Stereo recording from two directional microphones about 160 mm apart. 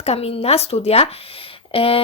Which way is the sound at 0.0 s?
40° left (ahead or behind).